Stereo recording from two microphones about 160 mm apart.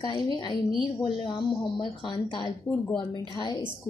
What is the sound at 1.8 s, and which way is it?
A woman's voice, 30° left (ahead or behind).